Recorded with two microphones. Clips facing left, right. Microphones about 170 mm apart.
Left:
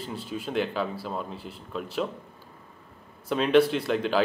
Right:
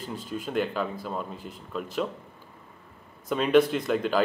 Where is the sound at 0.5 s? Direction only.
Centre (ahead or behind).